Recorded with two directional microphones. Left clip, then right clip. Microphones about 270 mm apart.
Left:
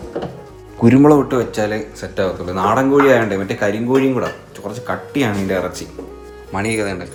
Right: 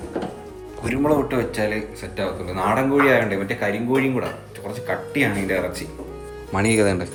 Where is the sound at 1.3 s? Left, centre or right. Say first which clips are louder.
Left 4 dB; centre.